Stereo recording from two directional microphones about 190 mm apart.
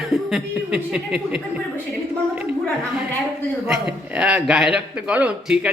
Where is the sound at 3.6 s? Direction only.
5° right (ahead or behind).